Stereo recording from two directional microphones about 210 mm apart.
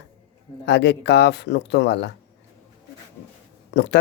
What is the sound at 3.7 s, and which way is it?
Speech, 55° left (ahead or behind).